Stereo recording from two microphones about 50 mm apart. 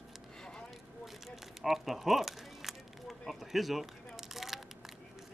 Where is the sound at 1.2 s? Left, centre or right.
Centre.